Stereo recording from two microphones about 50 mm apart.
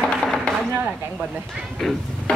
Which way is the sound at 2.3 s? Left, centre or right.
Left.